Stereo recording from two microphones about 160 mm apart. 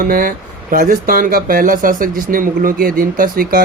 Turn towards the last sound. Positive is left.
turn(degrees=-60)  # may be behind; listen again after turning